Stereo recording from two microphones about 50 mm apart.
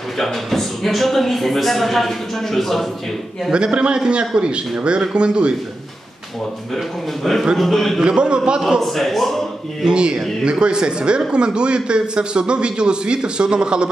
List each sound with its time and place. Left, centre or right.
0.2 s a man's voice: centre
3.5 s speech: centre
7.5 s a man's voice: centre
8.0 s a man's voice: centre
8.8 s a man's voice: centre
9.8 s speech: centre